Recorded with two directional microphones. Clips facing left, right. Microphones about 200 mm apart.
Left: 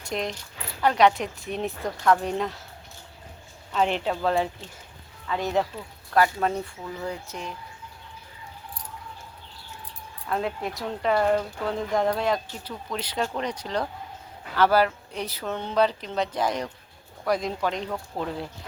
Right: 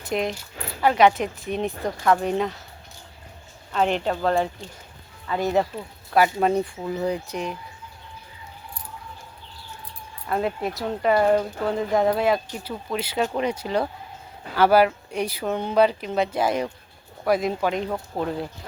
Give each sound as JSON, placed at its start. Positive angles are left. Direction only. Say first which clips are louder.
{"t": 0.0, "sound": "speech", "louder": "right 4 dB", "side_deg": -5}
{"t": 3.7, "sound": "speech", "louder": "right 2 dB", "side_deg": 0}
{"t": 5.7, "sound": "speech", "louder": "right 2 dB", "side_deg": -15}
{"t": 10.2, "sound": "speech", "louder": "right 3 dB", "side_deg": -5}